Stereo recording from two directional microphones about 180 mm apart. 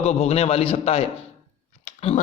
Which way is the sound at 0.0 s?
35° left (ahead or behind).